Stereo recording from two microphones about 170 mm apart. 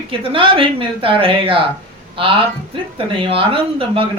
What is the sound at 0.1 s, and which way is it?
Male singing, 30° right (ahead or behind).